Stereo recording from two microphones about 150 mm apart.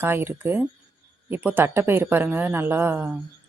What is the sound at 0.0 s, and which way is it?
A woman's voice, 15° right (ahead or behind).